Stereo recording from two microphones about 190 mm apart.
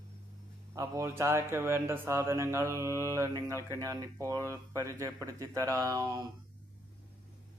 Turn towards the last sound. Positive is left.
turn(degrees=-20)  # may be behind; listen again after turning